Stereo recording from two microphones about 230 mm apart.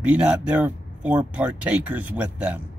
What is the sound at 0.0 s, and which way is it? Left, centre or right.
Speech, centre.